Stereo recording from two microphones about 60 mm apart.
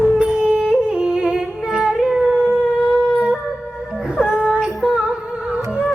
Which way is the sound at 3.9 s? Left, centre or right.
Centre.